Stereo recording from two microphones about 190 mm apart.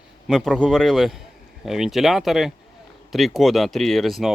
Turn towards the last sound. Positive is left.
turn(degrees=0)  # may be behind; listen again after turning